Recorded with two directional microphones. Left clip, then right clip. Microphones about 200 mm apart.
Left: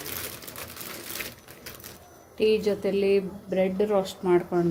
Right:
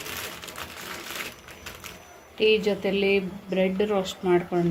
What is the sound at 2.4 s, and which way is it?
Speech, 10° left (ahead or behind).